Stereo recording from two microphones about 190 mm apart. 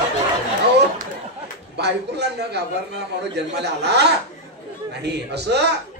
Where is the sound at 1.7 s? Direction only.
60° right (ahead or behind).